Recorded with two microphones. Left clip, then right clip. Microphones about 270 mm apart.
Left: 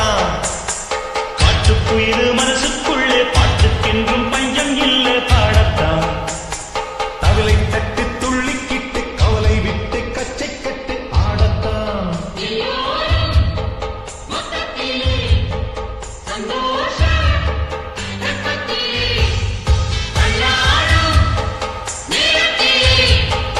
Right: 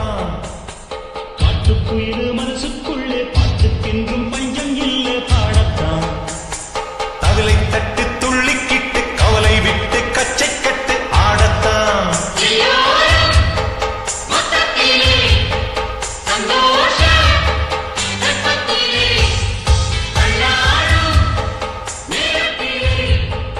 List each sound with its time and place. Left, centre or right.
0.0 s music: left
1.4 s music: left; by 22.5 s centre
22.5 s music: centre